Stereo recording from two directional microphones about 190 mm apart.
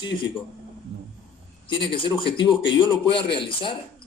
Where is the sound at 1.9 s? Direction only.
25° left (ahead or behind).